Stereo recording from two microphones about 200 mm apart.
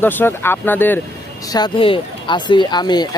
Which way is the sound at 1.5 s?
25° left (ahead or behind).